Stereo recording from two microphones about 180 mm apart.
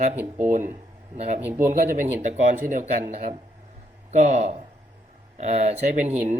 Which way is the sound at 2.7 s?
35° right (ahead or behind).